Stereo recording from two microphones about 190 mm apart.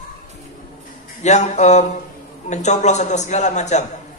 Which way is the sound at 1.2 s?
35° left (ahead or behind).